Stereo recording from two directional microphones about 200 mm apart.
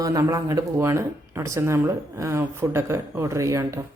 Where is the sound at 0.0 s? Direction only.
15° right (ahead or behind).